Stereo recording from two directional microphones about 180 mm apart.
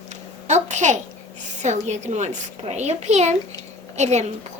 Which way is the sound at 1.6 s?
40° right (ahead or behind).